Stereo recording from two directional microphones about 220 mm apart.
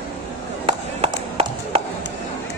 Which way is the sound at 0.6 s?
25° right (ahead or behind).